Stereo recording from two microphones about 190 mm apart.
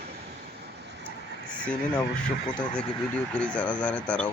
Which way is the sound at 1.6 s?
5° left (ahead or behind).